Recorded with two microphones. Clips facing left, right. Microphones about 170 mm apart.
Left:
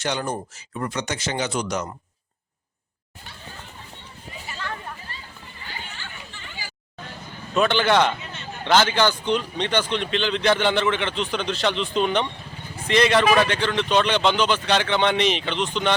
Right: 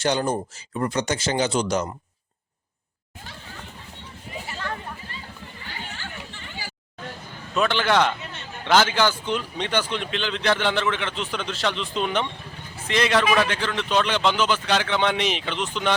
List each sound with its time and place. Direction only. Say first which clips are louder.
0.0 s speech: right 4 dB; 30° right (ahead or behind)
7.5 s speech: left 2 dB; centre (ahead or behind)